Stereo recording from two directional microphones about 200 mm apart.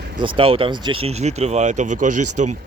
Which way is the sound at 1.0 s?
35° right (ahead or behind).